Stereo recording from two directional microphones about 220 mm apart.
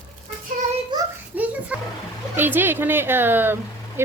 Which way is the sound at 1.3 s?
5° right (ahead or behind).